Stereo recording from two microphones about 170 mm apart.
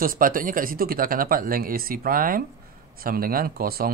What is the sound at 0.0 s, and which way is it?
Speech, 55° right (ahead or behind).